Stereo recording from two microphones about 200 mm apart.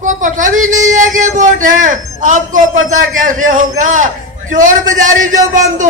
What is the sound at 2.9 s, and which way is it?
A man's voice, 40° right (ahead or behind).